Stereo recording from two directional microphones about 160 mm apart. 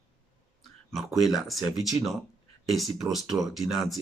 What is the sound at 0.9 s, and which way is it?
Speech, centre (ahead or behind).